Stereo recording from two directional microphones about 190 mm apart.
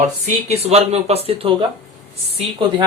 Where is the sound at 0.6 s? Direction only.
35° right (ahead or behind).